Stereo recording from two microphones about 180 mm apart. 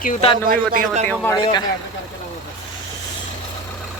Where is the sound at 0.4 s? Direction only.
50° right (ahead or behind).